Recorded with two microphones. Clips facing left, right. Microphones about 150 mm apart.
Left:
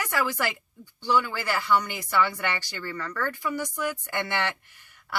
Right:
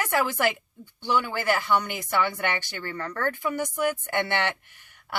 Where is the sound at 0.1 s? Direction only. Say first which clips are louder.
Right 4 dB; 20° right (ahead or behind).